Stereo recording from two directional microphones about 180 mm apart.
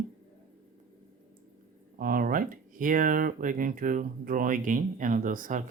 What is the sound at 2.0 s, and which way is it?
Speech, 50° right (ahead or behind).